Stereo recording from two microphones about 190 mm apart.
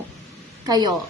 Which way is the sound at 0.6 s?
20° right (ahead or behind).